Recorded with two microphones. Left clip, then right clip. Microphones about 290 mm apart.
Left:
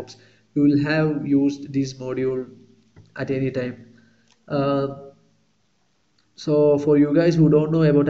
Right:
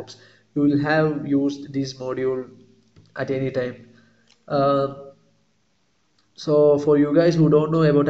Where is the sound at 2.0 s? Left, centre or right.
Right.